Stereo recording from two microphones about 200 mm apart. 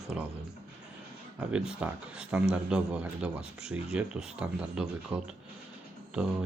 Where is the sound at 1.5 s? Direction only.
5° right (ahead or behind).